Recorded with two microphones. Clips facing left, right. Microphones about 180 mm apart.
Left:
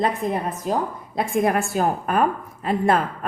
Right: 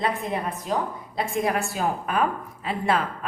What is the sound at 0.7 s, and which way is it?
A woman's voice, 45° left (ahead or behind).